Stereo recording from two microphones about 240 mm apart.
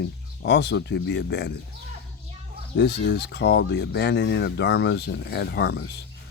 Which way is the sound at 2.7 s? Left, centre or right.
Left.